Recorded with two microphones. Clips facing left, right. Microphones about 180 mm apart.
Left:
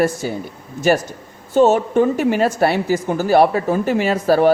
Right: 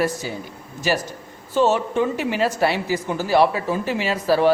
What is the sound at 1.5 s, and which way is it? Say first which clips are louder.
A woman's voice: left 5 dB; 45° left (ahead or behind).